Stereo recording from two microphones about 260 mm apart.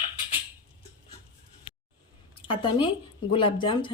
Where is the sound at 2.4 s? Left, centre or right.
Centre.